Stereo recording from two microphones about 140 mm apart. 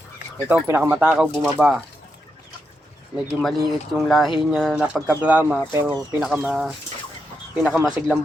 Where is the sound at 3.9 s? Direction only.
Centre (ahead or behind); by 5.9 s 15° right (ahead or behind).